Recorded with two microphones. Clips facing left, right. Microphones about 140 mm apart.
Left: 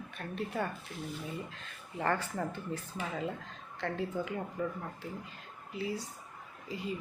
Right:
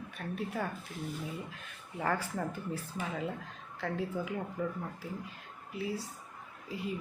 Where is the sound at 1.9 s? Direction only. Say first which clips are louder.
Left 1 dB; centre (ahead or behind).